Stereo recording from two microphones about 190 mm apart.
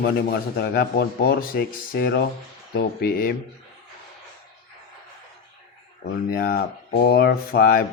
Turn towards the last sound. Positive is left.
turn(degrees=50)  # may be behind; listen again after turning